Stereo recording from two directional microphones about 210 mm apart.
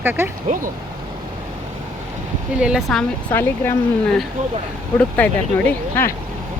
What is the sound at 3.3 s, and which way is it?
Speech, 10° left (ahead or behind).